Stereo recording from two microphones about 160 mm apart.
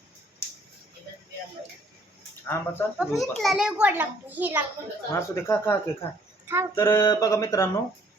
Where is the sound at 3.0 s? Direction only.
Centre (ahead or behind).